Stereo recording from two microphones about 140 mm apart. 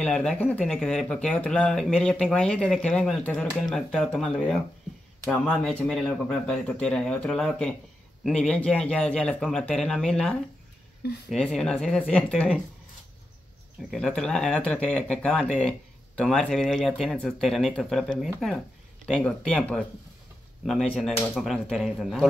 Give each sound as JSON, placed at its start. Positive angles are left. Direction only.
{"t": 0.0, "sound": "a man's voice", "side_deg": 5}
{"t": 13.8, "sound": "a man's voice", "side_deg": 5}